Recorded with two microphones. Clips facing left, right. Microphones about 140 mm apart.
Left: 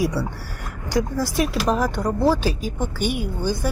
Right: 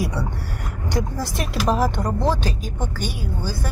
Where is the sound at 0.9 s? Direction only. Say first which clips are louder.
Left 3 dB; 20° right (ahead or behind).